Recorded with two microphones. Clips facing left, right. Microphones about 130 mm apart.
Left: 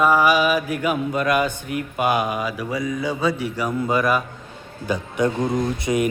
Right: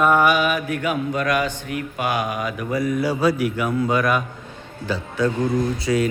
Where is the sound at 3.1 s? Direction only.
5° right (ahead or behind).